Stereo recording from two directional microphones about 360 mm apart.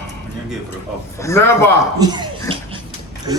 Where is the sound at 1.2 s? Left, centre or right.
Centre.